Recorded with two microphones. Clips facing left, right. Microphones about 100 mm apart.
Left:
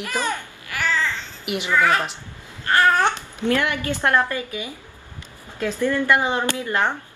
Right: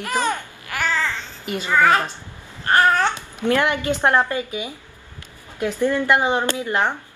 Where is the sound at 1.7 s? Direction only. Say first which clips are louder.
Right 3 dB; 20° right (ahead or behind).